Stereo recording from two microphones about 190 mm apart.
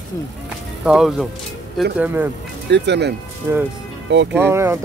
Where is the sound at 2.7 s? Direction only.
65° right (ahead or behind).